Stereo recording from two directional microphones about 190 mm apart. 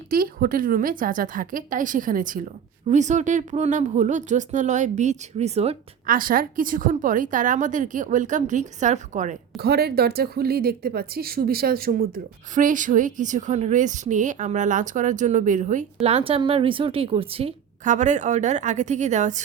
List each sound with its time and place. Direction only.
0.1 s a woman's voice: 50° right (ahead or behind); by 5.7 s 35° right (ahead or behind)
6.1 s speech: 45° right (ahead or behind)
9.6 s a woman's voice: 55° right (ahead or behind); by 19.4 s 40° right (ahead or behind)